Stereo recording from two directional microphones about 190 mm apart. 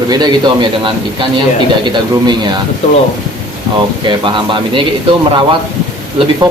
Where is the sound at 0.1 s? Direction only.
25° right (ahead or behind).